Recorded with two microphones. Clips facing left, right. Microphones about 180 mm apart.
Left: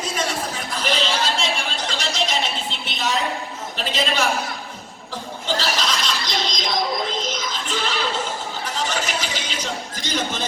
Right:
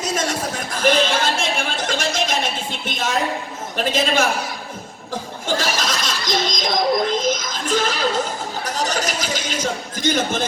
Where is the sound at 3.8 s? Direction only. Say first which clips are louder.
Right 4 dB; 50° right (ahead or behind).